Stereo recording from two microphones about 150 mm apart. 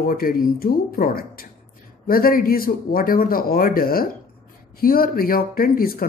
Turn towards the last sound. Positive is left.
turn(degrees=75)  # may be behind; listen again after turning